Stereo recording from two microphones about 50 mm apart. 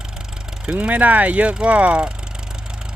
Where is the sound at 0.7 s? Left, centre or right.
Right.